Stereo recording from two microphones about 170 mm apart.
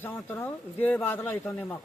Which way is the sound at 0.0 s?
10° left (ahead or behind).